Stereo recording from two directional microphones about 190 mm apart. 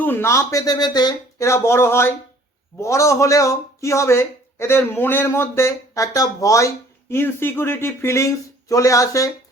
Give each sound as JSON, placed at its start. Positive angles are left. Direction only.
{"t": 0.0, "sound": "a man's voice", "side_deg": 10}